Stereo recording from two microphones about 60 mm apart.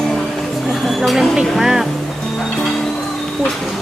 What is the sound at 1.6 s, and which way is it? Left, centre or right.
Speech, centre.